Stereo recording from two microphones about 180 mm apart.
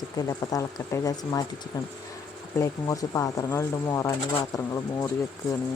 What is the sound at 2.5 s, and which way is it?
Speech, 20° left (ahead or behind).